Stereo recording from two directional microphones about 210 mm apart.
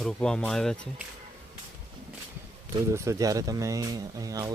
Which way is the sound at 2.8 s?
15° right (ahead or behind).